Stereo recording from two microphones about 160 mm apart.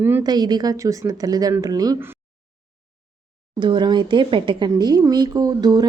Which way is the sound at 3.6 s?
30° right (ahead or behind).